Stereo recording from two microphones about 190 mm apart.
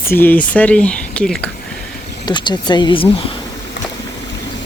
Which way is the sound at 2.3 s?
25° left (ahead or behind).